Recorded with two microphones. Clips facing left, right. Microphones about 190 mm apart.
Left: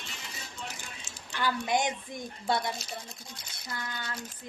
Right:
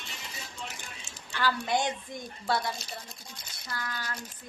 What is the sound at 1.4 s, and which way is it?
Speech, 15° left (ahead or behind).